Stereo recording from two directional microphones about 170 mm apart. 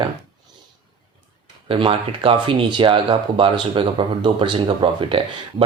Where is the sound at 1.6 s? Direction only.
30° right (ahead or behind).